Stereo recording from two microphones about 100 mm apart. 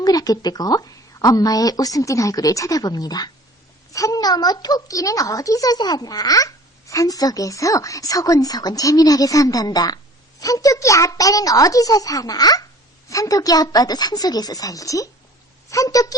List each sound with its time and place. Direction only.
0.0 s a child's voice: 40° left (ahead or behind)